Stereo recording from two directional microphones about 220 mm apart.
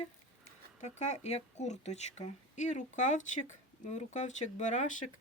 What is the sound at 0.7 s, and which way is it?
Speech, 30° left (ahead or behind).